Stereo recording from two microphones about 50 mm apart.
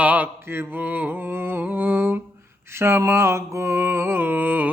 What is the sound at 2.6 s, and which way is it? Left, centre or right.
Speech, right.